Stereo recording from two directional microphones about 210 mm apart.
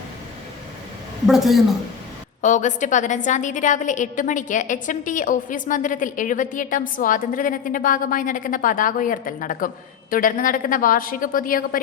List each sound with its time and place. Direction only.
1.3 s a woman's voice: centre (ahead or behind)
2.4 s a woman's voice: 35° left (ahead or behind)